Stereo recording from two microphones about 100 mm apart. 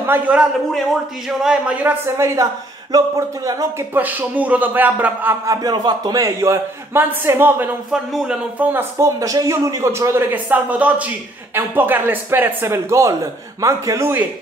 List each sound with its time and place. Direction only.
0.3 s a man's voice: 15° right (ahead or behind); by 3.6 s 35° right (ahead or behind)
3.9 s a man's voice: 15° right (ahead or behind)
5.5 s speech: 40° right (ahead or behind); by 7.7 s 20° right (ahead or behind)
7.9 s a man's voice: 5° right (ahead or behind)
8.9 s speech: 30° right (ahead or behind)
10.3 s a man's voice: 15° right (ahead or behind)